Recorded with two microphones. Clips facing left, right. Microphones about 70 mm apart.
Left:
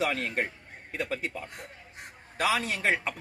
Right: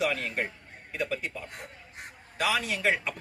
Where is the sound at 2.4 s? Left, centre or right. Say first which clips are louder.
Even; left.